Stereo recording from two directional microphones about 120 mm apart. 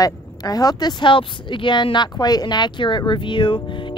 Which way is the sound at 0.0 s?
30° left (ahead or behind).